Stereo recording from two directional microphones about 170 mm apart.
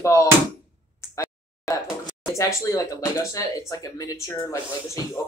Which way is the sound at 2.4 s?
20° left (ahead or behind).